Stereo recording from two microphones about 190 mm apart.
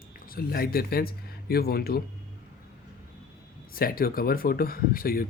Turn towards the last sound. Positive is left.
turn(degrees=50)  # may be behind; listen again after turning